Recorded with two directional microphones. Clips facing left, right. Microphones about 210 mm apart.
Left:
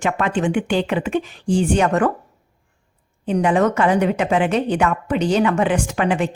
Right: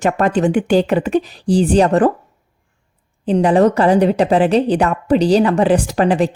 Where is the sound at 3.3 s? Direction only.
35° right (ahead or behind).